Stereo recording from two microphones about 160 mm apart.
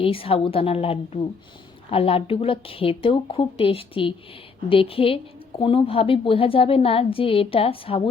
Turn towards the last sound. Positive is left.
turn(degrees=35)  # may be behind; listen again after turning